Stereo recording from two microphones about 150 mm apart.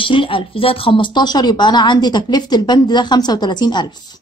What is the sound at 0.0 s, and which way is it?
Speech, 35° left (ahead or behind).